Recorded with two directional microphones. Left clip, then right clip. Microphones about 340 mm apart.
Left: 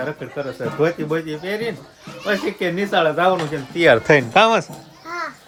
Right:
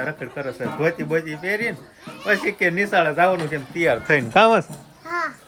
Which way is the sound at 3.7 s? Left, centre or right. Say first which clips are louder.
Left 7 dB; left.